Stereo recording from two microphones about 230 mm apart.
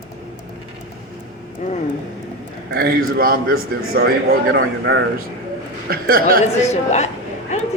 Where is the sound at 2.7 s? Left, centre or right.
Right.